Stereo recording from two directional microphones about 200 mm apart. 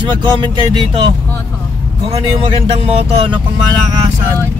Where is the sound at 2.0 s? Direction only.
30° right (ahead or behind).